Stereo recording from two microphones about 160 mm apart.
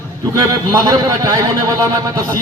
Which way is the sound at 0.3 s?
20° right (ahead or behind).